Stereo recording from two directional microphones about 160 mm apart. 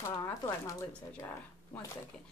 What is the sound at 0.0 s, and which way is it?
A woman's voice, 20° left (ahead or behind).